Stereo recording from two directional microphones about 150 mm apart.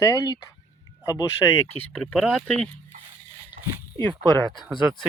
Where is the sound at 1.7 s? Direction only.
10° left (ahead or behind).